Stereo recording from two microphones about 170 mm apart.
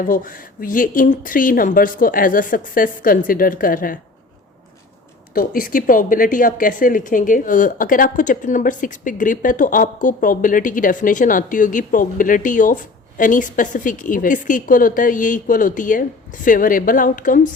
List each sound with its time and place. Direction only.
0.0 s speech: 55° left (ahead or behind)
5.3 s speech: 55° left (ahead or behind)